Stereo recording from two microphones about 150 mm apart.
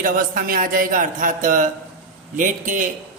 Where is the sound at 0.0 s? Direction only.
70° right (ahead or behind).